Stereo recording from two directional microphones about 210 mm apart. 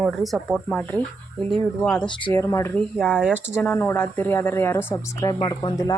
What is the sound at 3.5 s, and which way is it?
Speech, 10° left (ahead or behind).